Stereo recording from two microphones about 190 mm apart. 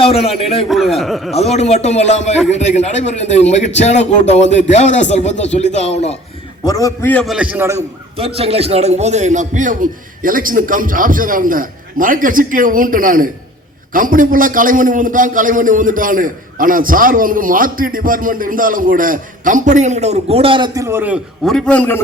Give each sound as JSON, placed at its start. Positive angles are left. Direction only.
{"t": 0.0, "sound": "a man's voice", "side_deg": 30}
{"t": 0.7, "sound": "speech", "side_deg": 0}
{"t": 1.3, "sound": "a man's voice", "side_deg": 35}
{"t": 6.7, "sound": "a man's voice", "side_deg": 15}
{"t": 7.3, "sound": "a man's voice", "side_deg": -10}
{"t": 7.8, "sound": "a man's voice", "side_deg": -30}
{"t": 21.4, "sound": "a man's voice", "side_deg": 5}